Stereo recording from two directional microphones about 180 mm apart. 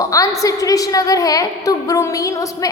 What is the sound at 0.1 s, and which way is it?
A woman's voice, 20° left (ahead or behind).